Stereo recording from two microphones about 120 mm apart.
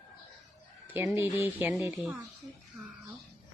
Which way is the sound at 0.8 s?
15° right (ahead or behind).